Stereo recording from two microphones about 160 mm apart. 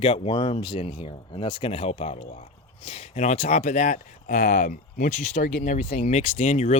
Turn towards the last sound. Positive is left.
turn(degrees=45)  # may be behind; listen again after turning